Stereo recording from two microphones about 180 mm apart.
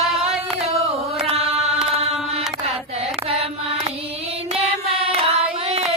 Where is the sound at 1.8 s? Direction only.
35° right (ahead or behind).